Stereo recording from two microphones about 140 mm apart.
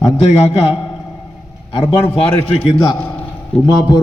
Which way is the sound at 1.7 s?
45° left (ahead or behind).